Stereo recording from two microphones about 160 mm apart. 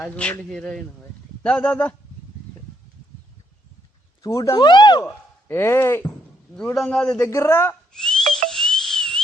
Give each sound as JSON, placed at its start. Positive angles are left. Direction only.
{"t": 0.0, "sound": "speech", "side_deg": 5}
{"t": 4.2, "sound": "speech", "side_deg": 20}
{"t": 5.5, "sound": "a man's voice", "side_deg": 15}
{"t": 7.2, "sound": "speech", "side_deg": 15}
{"t": 7.9, "sound": "whistle", "side_deg": 5}
{"t": 8.4, "sound": "a sound", "side_deg": 5}